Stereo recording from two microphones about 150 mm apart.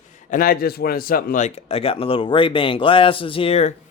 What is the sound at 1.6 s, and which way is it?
A man's voice, 40° left (ahead or behind).